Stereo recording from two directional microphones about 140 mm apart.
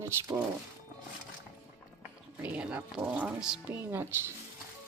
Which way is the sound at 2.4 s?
10° right (ahead or behind).